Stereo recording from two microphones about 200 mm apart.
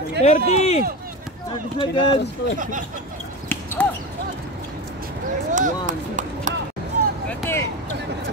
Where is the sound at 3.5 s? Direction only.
10° left (ahead or behind).